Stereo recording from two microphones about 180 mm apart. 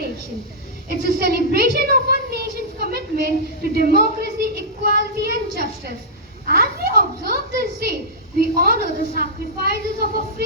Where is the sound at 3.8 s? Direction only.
60° right (ahead or behind).